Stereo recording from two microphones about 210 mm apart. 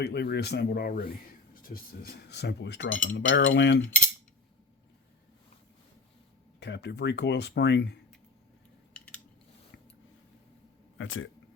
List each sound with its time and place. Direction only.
0.0 s speech: 50° left (ahead or behind)
6.6 s speech: 55° left (ahead or behind)
8.9 s a sound: 5° left (ahead or behind)
10.9 s speech: 70° left (ahead or behind)